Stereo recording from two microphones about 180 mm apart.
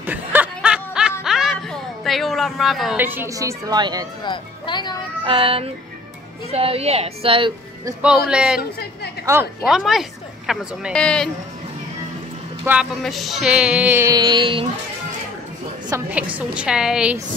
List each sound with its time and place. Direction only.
0.0 s snicker: 10° right (ahead or behind)
1.2 s music: centre (ahead or behind)
3.0 s a woman's voice: 10° right (ahead or behind)
4.2 s speech: 25° left (ahead or behind)
5.2 s a woman's voice: 30° right (ahead or behind)
8.3 s a woman's voice: 5° right (ahead or behind)
9.7 s a woman's voice: centre (ahead or behind)
12.7 s speech: 15° right (ahead or behind)
13.0 s speech: centre (ahead or behind); by 14.7 s 30° right (ahead or behind)
16.1 s speech: 10° right (ahead or behind)